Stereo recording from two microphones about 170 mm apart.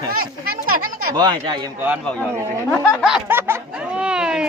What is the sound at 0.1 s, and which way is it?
Speech, 55° right (ahead or behind).